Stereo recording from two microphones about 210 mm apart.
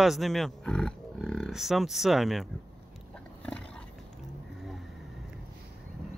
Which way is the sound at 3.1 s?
5° left (ahead or behind).